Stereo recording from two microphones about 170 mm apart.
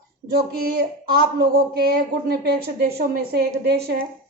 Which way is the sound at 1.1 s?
65° right (ahead or behind).